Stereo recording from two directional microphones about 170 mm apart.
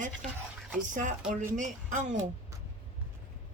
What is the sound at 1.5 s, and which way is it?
Speech, 50° right (ahead or behind).